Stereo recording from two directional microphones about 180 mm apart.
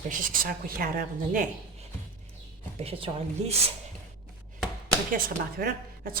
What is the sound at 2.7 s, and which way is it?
Speech, 30° right (ahead or behind).